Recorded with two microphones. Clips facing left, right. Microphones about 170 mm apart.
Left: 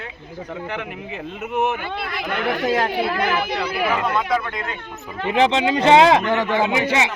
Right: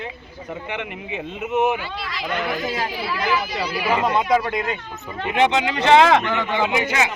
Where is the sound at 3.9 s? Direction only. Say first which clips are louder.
Right 6 dB; 20° right (ahead or behind).